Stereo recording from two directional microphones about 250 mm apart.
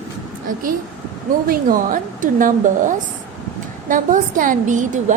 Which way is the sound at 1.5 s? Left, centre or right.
Right.